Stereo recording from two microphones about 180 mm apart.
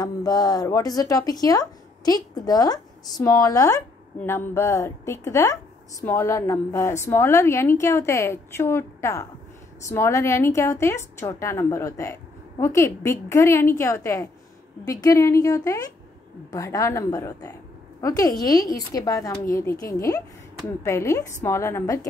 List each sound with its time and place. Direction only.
0.0 s a woman's voice: 20° left (ahead or behind)